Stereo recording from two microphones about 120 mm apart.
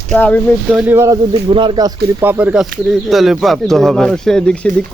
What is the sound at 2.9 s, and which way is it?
Speech, centre (ahead or behind).